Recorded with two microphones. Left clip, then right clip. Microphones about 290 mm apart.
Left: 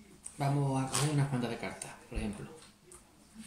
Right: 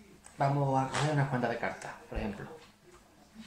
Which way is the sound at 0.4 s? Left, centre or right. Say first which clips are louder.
Right 5 dB; centre.